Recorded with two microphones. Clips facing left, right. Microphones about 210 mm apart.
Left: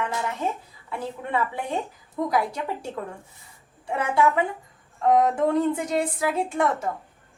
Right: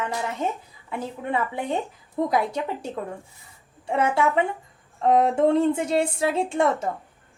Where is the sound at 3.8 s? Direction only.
25° right (ahead or behind).